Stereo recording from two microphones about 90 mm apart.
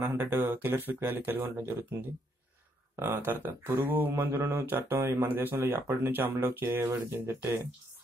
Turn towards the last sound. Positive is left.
turn(degrees=-25)  # may be behind; listen again after turning